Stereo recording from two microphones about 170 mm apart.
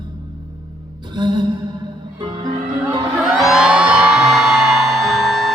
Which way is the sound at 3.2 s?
5° right (ahead or behind).